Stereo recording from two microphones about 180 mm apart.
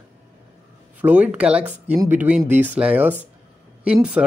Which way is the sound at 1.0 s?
10° right (ahead or behind).